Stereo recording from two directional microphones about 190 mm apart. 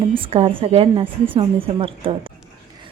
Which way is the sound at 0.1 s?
30° right (ahead or behind).